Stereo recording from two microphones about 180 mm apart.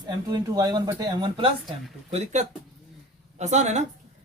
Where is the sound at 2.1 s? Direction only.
40° right (ahead or behind).